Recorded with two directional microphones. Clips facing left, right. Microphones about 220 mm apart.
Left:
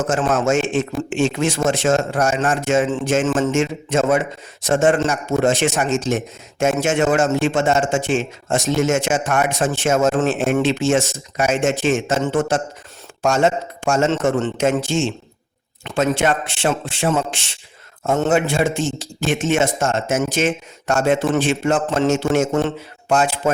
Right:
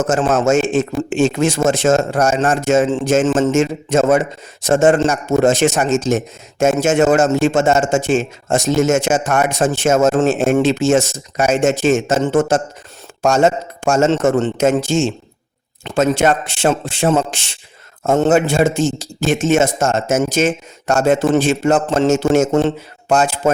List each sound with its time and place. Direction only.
0.1 s a man's voice: 40° right (ahead or behind)